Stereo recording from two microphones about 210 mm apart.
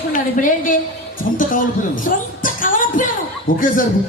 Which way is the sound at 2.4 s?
40° left (ahead or behind).